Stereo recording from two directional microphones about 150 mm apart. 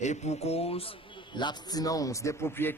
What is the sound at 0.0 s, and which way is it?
Mantra, 50° left (ahead or behind).